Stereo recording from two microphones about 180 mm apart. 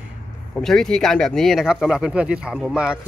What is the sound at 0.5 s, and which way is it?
Speech, 5° left (ahead or behind).